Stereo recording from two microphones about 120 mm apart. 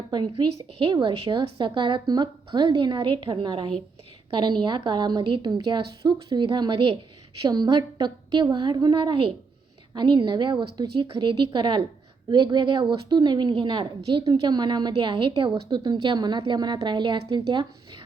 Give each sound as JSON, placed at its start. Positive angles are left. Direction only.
{"t": 0.1, "sound": "a woman's voice", "side_deg": -40}